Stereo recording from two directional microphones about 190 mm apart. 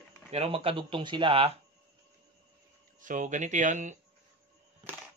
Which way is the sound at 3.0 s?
40° right (ahead or behind).